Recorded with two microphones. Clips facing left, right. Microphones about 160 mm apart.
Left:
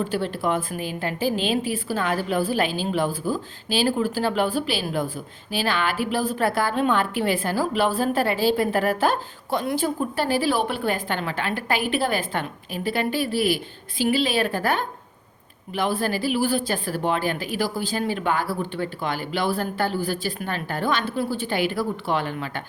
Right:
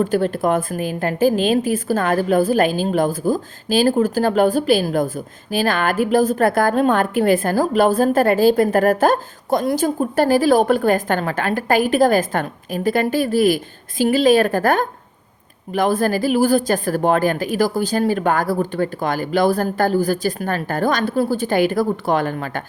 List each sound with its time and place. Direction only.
0.0 s a woman's voice: 45° right (ahead or behind)